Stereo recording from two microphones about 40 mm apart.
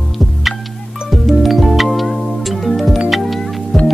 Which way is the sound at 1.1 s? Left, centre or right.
Centre.